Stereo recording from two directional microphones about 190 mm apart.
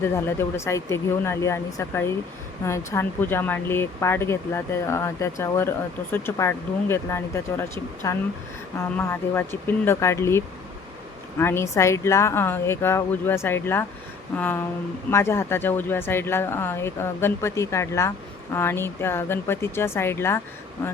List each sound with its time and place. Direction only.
0.0 s speech: 10° left (ahead or behind)